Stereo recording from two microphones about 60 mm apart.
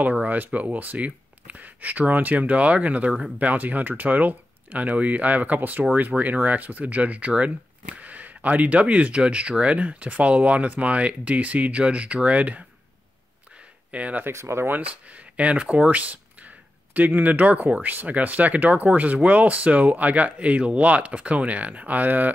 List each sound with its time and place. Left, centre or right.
0.0 s speech: right
13.9 s speech: right
14.2 s speech: right
14.7 s speech: right